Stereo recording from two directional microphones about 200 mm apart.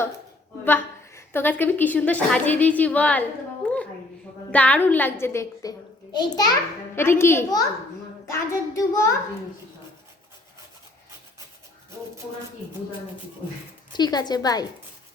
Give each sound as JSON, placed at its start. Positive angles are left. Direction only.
{"t": 0.6, "sound": "a woman's voice", "side_deg": 10}
{"t": 13.9, "sound": "a woman's voice", "side_deg": 20}